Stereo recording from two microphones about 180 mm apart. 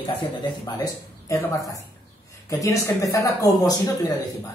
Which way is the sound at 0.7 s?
20° left (ahead or behind).